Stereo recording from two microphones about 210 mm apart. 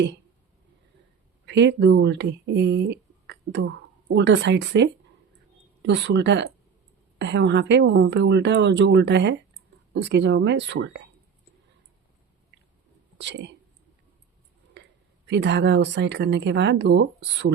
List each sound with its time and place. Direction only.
1.5 s a woman's voice: 55° right (ahead or behind)
13.1 s speech: 55° right (ahead or behind)
14.8 s a sound: 55° right (ahead or behind)
15.3 s a woman's voice: 55° right (ahead or behind)